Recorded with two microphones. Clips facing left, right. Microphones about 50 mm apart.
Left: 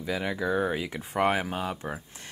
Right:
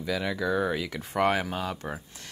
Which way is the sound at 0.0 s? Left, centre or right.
Left.